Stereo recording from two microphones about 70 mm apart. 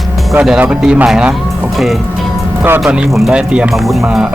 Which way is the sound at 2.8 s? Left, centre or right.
Centre.